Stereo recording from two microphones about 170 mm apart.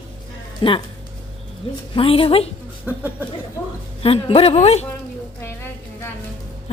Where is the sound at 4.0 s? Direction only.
35° left (ahead or behind).